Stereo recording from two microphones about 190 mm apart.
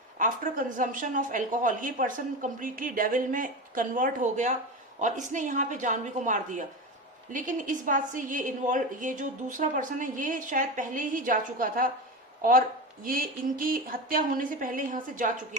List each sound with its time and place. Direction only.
0.2 s a woman's voice: 45° right (ahead or behind)